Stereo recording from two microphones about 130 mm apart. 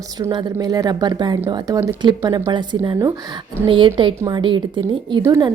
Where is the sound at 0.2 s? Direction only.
30° right (ahead or behind).